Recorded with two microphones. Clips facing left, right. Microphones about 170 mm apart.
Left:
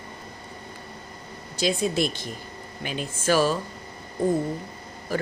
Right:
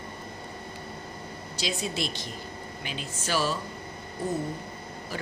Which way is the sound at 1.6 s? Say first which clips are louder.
Left 8 dB; 50° left (ahead or behind).